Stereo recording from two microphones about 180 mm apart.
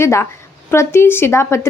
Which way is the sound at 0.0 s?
15° left (ahead or behind).